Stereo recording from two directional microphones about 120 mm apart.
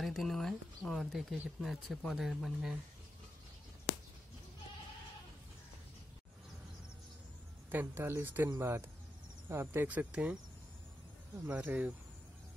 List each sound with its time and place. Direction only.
0.0 s speech: centre (ahead or behind)
7.7 s speech: 15° right (ahead or behind)
11.4 s speech: 10° right (ahead or behind)